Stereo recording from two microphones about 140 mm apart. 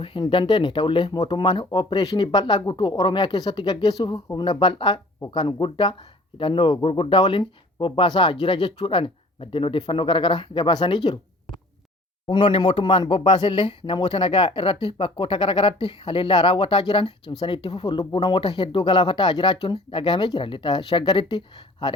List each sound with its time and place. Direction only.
0.0 s speech: 35° left (ahead or behind)
12.3 s speech: 35° left (ahead or behind)